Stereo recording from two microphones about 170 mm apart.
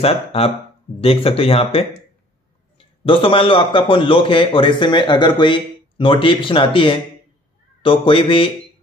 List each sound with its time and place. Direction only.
0.0 s a man's voice: 35° left (ahead or behind)
3.0 s a man's voice: 30° left (ahead or behind)